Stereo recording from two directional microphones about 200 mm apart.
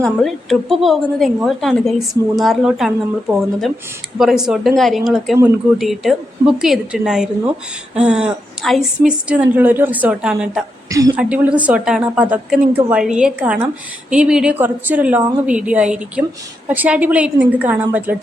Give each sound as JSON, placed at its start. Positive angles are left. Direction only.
{"t": 0.0, "sound": "a woman's voice", "side_deg": 0}
{"t": 10.8, "sound": "a woman's voice", "side_deg": -15}
{"t": 11.2, "sound": "a woman's voice", "side_deg": -5}